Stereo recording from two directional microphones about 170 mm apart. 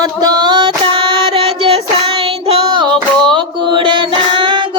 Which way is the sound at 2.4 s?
30° right (ahead or behind).